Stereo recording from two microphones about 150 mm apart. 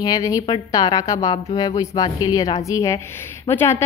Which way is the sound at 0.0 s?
25° left (ahead or behind).